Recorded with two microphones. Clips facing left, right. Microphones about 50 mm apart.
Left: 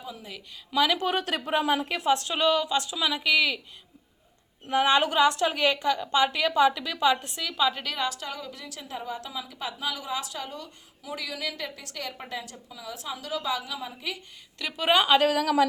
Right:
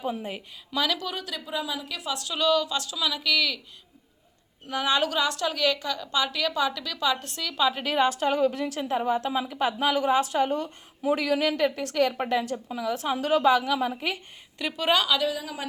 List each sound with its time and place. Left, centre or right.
0.2 s a woman's voice: right
0.9 s speech: left
4.7 s a woman's voice: left
7.5 s a woman's voice: centre
7.9 s a woman's voice: right
14.8 s a woman's voice: centre
15.2 s a woman's voice: left